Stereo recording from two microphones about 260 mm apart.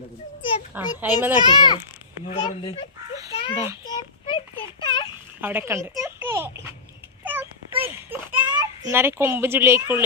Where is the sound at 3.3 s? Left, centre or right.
Centre.